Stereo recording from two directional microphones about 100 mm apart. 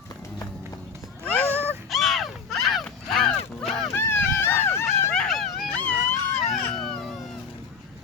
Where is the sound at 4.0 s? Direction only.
25° left (ahead or behind).